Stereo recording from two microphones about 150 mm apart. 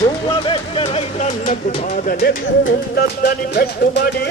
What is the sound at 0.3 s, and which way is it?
Music, 35° left (ahead or behind).